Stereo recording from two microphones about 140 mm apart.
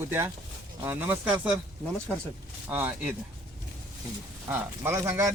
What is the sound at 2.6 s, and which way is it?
Speech, 10° right (ahead or behind).